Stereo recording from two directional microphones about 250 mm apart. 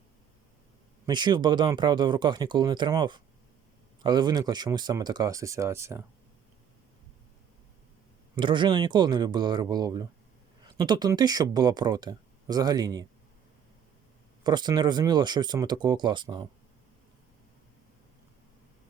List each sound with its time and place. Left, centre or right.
1.0 s speech: centre
8.4 s speech: centre
14.4 s speech: centre